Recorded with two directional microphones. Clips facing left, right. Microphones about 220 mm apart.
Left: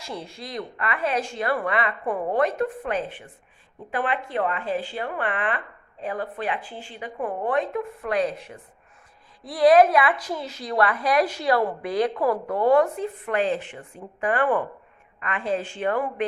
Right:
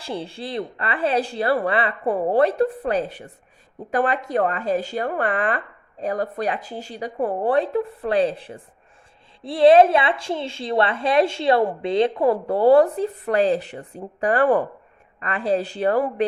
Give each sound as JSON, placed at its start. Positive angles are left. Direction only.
{"t": 0.0, "sound": "a woman's voice", "side_deg": -30}